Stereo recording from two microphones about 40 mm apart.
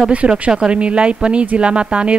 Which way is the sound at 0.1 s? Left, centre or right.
Right.